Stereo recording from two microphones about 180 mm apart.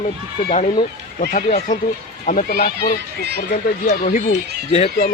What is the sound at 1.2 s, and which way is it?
Speech, 50° left (ahead or behind).